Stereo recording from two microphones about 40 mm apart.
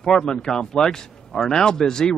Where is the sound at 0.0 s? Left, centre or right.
Centre.